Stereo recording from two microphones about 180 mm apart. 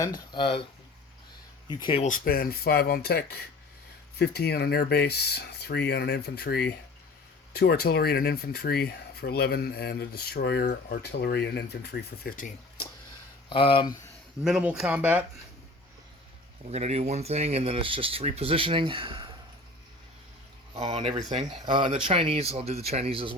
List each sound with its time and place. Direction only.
0.3 s speech: 30° left (ahead or behind)
1.7 s speech: 25° left (ahead or behind)
2.0 s speech: 50° left (ahead or behind)
13.5 s speech: 30° left (ahead or behind)
14.4 s speech: 5° right (ahead or behind)
16.7 s speech: 35° right (ahead or behind)
20.9 s speech: 35° right (ahead or behind)